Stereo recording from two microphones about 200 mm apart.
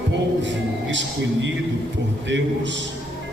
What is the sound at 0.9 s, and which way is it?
A man's voice, 65° right (ahead or behind).